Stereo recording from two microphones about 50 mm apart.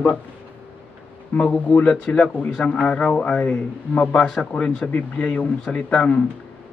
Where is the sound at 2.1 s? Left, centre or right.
Left.